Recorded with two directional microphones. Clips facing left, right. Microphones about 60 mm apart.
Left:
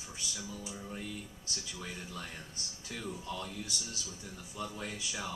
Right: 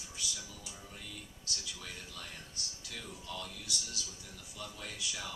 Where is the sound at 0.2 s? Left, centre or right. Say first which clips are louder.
Left 2 dB; left.